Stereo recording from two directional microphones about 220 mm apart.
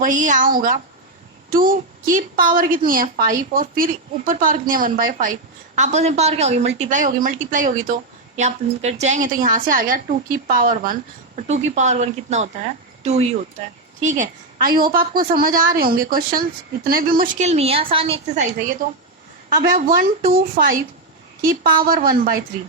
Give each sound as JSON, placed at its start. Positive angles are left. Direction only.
{"t": 0.0, "sound": "a woman's voice", "side_deg": -35}
{"t": 19.5, "sound": "a woman's voice", "side_deg": -40}